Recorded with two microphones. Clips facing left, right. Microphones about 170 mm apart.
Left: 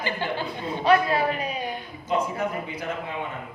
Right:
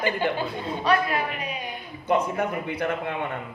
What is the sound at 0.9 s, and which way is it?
Speech, 30° left (ahead or behind).